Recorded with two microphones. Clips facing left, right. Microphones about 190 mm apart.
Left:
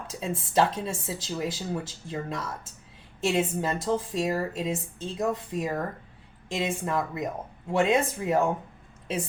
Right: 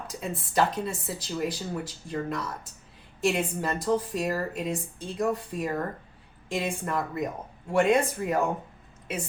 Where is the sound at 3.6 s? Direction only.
20° left (ahead or behind).